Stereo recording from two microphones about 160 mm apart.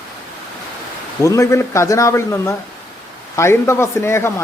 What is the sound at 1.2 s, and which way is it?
Speech, 20° left (ahead or behind).